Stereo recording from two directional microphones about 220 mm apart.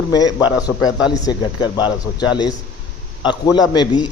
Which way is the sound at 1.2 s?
20° left (ahead or behind).